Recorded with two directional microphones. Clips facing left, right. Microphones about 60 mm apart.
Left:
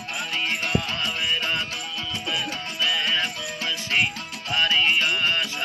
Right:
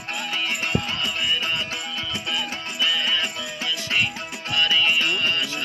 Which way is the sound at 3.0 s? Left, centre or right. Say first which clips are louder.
Even; left.